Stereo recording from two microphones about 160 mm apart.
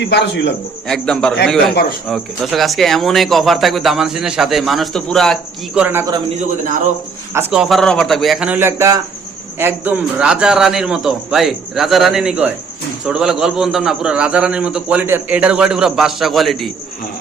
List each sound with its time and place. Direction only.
0.0 s a man's voice: 90° left
0.9 s speech: 5° left (ahead or behind)
1.7 s speech: 70° left (ahead or behind)
2.0 s speech: centre (ahead or behind)
5.8 s speech: 15° right (ahead or behind)
7.3 s speech: 15° right (ahead or behind)
7.6 s speech: centre (ahead or behind)